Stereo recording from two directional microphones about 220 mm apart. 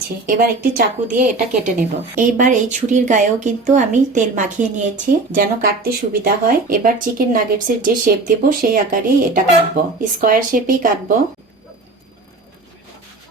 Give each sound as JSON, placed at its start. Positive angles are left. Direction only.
{"t": 1.2, "sound": "a woman's voice", "side_deg": -40}